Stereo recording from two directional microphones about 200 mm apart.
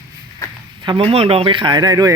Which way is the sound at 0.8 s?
30° right (ahead or behind).